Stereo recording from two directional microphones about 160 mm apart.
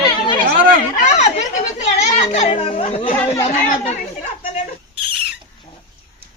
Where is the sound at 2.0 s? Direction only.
40° left (ahead or behind).